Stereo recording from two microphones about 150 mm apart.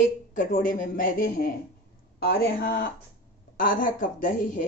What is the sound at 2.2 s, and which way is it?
Speech, 80° left.